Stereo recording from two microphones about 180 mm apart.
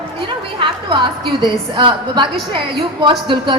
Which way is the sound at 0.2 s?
25° right (ahead or behind).